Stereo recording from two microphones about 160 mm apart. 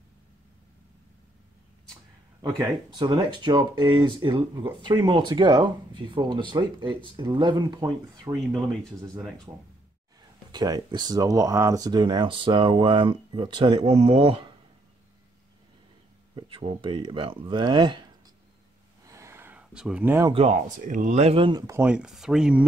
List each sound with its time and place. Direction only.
2.4 s speech: 25° right (ahead or behind)
10.5 s speech: 25° right (ahead or behind)
16.3 s speech: 30° right (ahead or behind)
19.0 s a sound: 20° right (ahead or behind)
20.2 s speech: 35° right (ahead or behind)
20.5 s speech: 55° right (ahead or behind); by 21.6 s 30° right (ahead or behind)
21.6 s speech: 15° right (ahead or behind)
21.9 s speech: 5° right (ahead or behind)